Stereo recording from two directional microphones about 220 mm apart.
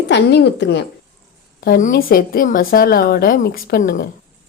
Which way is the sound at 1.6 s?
40° left (ahead or behind).